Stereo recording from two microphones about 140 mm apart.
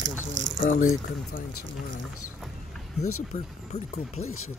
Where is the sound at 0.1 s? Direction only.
65° left (ahead or behind).